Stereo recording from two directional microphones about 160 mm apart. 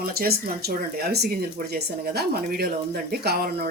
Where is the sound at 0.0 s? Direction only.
70° right (ahead or behind).